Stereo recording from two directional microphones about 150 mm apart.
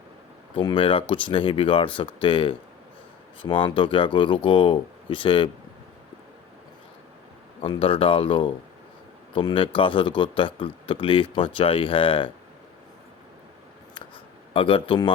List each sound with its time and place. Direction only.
0.5 s speech: 35° left (ahead or behind)
7.6 s speech: 35° left (ahead or behind)
14.5 s speech: 35° left (ahead or behind)